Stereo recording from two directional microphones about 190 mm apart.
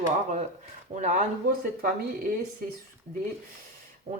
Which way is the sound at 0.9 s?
40° right (ahead or behind).